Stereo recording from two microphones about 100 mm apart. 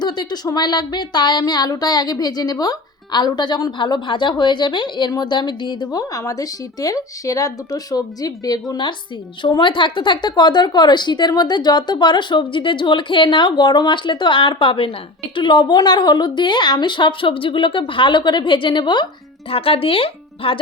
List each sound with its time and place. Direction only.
0.0 s speech: 45° left (ahead or behind)
19.5 s speech: 70° left (ahead or behind)